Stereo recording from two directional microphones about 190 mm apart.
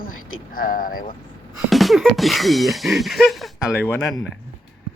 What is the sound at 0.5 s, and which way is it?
Speech, 50° left (ahead or behind).